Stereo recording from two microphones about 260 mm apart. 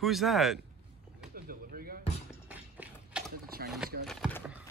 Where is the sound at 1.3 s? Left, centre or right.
Right.